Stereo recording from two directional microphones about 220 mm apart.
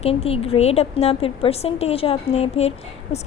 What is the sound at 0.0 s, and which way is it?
A woman's voice, 25° left (ahead or behind).